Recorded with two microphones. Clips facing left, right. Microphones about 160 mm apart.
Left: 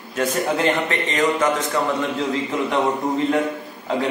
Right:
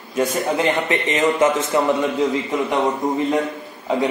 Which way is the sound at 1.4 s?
25° right (ahead or behind).